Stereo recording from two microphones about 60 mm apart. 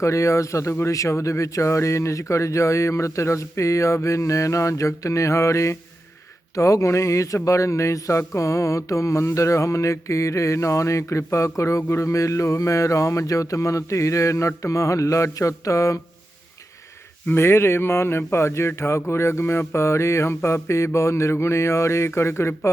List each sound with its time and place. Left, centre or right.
0.0 s mantra: left
17.3 s speech: left